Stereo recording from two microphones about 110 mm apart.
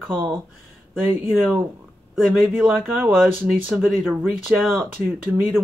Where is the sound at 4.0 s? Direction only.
20° right (ahead or behind).